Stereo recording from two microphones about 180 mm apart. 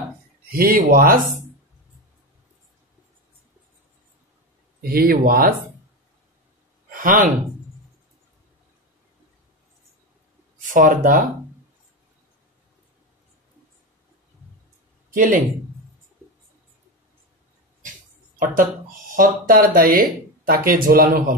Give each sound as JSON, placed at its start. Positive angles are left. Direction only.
{"t": 0.5, "sound": "speech", "side_deg": -55}
{"t": 4.8, "sound": "speech", "side_deg": -55}
{"t": 6.9, "sound": "a sound", "side_deg": -50}
{"t": 10.7, "sound": "speech", "side_deg": -50}
{"t": 15.1, "sound": "speech", "side_deg": -50}
{"t": 19.1, "sound": "speech", "side_deg": -50}